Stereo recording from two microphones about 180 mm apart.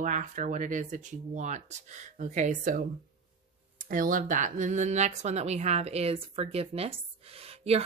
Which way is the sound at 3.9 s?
50° right (ahead or behind).